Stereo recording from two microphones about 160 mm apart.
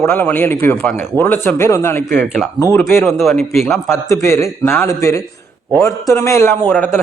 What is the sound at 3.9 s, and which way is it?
A man's voice, 15° left (ahead or behind).